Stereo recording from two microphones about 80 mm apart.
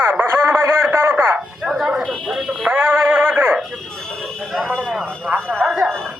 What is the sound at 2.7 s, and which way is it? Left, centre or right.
Synthetic singing, right.